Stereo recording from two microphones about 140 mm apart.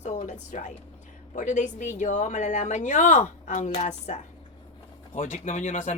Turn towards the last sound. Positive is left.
turn(degrees=60)  # may be behind; listen again after turning